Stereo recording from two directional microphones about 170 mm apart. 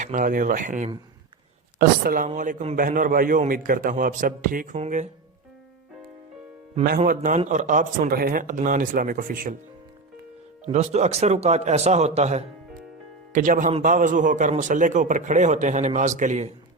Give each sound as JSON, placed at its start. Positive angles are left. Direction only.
{"t": 0.0, "sound": "a man's voice", "side_deg": -50}
{"t": 7.1, "sound": "a man's voice", "side_deg": -50}
{"t": 10.7, "sound": "a man's voice", "side_deg": -40}